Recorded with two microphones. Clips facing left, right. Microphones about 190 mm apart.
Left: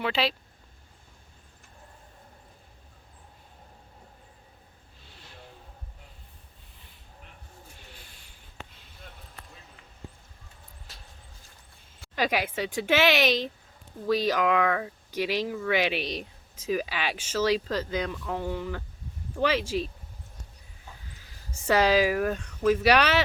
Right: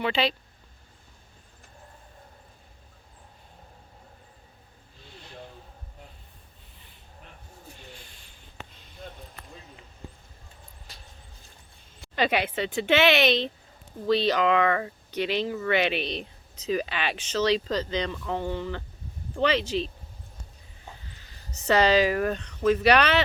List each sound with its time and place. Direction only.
0.0 s speech: centre (ahead or behind)
12.1 s speech: 5° left (ahead or behind)
21.1 s speech: 5° left (ahead or behind)